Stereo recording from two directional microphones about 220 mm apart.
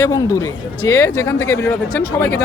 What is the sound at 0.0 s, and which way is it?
Speech, 15° left (ahead or behind).